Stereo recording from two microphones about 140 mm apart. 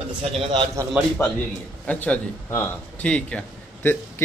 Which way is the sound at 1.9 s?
10° left (ahead or behind).